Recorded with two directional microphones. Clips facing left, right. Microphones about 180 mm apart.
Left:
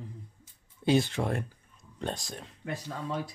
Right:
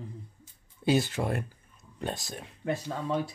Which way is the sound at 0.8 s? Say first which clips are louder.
Even; 5° right (ahead or behind).